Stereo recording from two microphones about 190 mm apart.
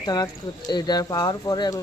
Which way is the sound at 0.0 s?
20° left (ahead or behind).